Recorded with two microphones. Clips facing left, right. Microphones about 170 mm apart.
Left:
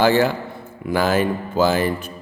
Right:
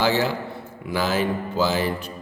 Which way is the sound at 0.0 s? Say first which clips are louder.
Left 5 dB; 50° left (ahead or behind).